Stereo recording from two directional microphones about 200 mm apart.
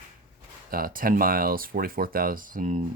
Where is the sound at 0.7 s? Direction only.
45° right (ahead or behind).